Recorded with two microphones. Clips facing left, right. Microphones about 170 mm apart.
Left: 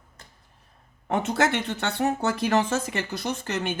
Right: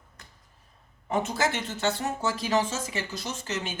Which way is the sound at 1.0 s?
65° left (ahead or behind).